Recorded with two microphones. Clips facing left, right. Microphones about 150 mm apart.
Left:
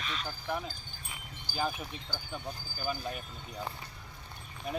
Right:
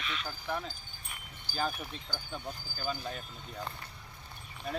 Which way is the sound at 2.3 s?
15° left (ahead or behind).